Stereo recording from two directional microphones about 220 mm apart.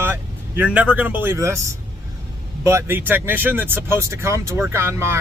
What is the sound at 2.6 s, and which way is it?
Speech, 15° right (ahead or behind).